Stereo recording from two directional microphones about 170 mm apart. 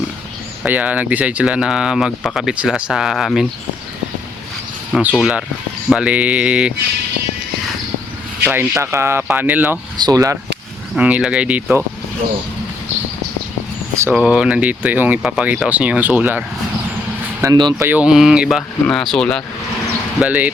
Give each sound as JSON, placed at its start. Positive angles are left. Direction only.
{"t": 0.6, "sound": "speech", "side_deg": -10}
{"t": 4.9, "sound": "speech", "side_deg": 0}
{"t": 8.4, "sound": "speech", "side_deg": -10}
{"t": 10.0, "sound": "speech", "side_deg": -20}
{"t": 10.9, "sound": "speech", "side_deg": -5}
{"t": 13.9, "sound": "speech", "side_deg": -15}
{"t": 17.4, "sound": "speech", "side_deg": -25}
{"t": 17.8, "sound": "speech", "side_deg": -10}
{"t": 20.1, "sound": "speech", "side_deg": -10}